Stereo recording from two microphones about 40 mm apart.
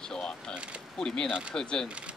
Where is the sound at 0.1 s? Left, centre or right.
Centre.